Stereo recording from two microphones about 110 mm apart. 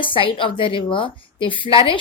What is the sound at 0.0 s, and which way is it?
A woman's voice, 50° left (ahead or behind).